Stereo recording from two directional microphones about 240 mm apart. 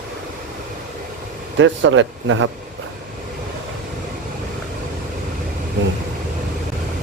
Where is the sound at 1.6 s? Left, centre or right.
Right.